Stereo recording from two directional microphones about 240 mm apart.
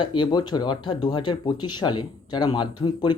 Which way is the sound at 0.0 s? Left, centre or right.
Centre.